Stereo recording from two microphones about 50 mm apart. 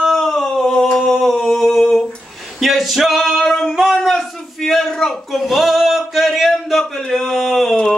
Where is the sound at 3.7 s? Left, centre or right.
Centre.